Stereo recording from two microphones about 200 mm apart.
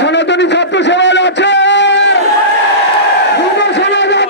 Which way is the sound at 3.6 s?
60° left (ahead or behind).